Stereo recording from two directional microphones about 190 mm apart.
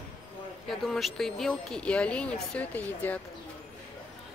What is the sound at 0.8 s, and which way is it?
Speech, centre (ahead or behind).